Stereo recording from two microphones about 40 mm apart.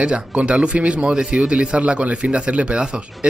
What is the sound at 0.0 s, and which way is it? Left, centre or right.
Speech, right.